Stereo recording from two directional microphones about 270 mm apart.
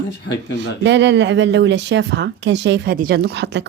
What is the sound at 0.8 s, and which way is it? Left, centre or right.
Speech, right.